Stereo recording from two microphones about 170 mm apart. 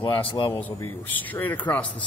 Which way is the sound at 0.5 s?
10° left (ahead or behind).